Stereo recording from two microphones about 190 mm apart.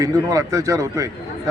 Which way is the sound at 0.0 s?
20° right (ahead or behind).